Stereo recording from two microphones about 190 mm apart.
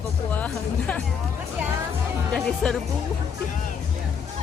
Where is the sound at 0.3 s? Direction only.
10° left (ahead or behind).